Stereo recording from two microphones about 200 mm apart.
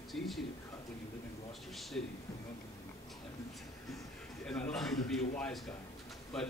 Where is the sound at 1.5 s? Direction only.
Centre (ahead or behind).